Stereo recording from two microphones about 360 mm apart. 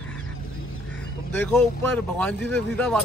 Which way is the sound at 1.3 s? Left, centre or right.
Centre.